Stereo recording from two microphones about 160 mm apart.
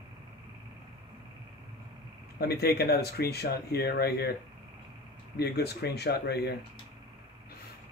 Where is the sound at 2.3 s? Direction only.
80° left.